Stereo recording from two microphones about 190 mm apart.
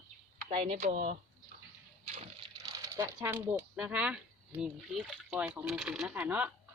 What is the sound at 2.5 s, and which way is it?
Speech, 20° right (ahead or behind).